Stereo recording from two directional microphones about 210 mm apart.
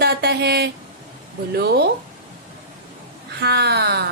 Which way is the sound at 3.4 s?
50° right (ahead or behind).